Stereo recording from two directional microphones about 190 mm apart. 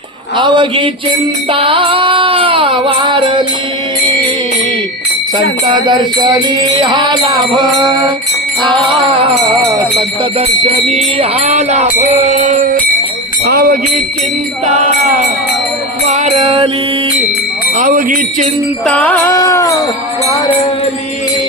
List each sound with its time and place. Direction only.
0.3 s music: 25° right (ahead or behind)
5.7 s music: 25° right (ahead or behind)
10.6 s music: 35° right (ahead or behind)
13.5 s speech: 55° right (ahead or behind)
16.0 s music: 35° right (ahead or behind)
17.7 s speech: 45° right (ahead or behind)
18.9 s music: 5° left (ahead or behind)